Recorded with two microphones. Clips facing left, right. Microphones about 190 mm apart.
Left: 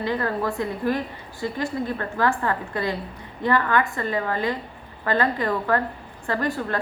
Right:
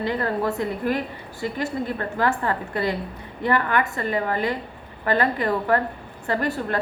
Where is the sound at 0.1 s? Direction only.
20° right (ahead or behind).